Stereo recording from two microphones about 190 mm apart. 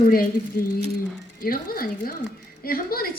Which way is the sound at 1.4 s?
50° left (ahead or behind).